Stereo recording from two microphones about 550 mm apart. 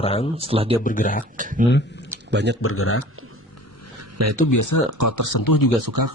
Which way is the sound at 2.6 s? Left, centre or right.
Left.